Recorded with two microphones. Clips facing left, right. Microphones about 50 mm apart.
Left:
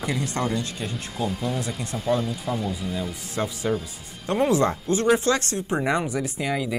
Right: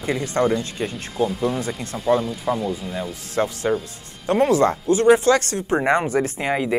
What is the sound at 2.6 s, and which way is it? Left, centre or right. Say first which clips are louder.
Speech: right 3 dB; centre.